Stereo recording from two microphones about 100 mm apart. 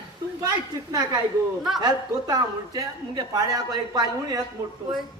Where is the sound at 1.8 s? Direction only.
45° right (ahead or behind).